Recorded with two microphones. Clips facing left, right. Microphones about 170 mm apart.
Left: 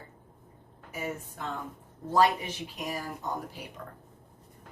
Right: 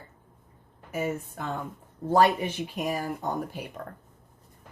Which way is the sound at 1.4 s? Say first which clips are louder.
Right 3 dB; 55° right (ahead or behind).